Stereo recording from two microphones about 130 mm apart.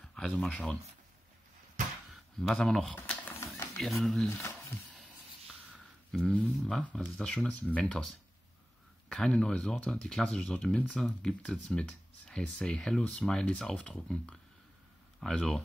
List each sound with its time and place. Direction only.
0.1 s speech: 5° left (ahead or behind)
2.4 s speech: 5° left (ahead or behind)
3.0 s music: 15° left (ahead or behind)
3.8 s speech: centre (ahead or behind)
4.3 s speech: 25° left (ahead or behind)
6.5 s speech: 5° left (ahead or behind)